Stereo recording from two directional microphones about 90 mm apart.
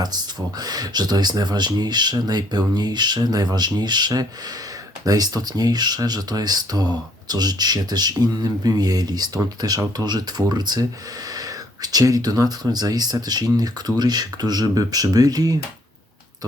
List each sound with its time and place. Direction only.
0.6 s speech: 50° right (ahead or behind)